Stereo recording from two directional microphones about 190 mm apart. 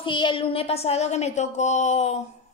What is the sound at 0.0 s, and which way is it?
A woman's voice, 25° left (ahead or behind).